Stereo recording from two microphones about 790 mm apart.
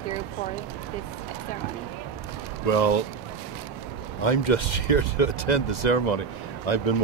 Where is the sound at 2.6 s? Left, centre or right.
Left.